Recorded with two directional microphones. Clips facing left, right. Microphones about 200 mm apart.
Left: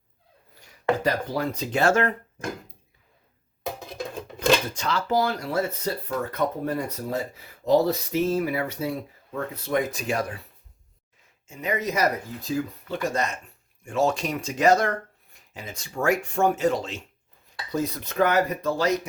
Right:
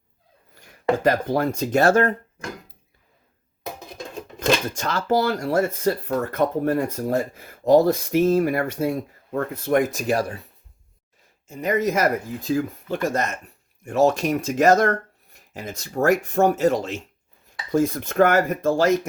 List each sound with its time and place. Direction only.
0.6 s speech: 55° right (ahead or behind); by 2.1 s 35° right (ahead or behind)
4.4 s speech: 45° right (ahead or behind)
11.5 s speech: 45° right (ahead or behind)